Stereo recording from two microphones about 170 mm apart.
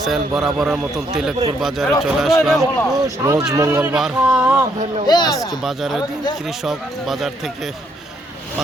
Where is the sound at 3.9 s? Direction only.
5° right (ahead or behind).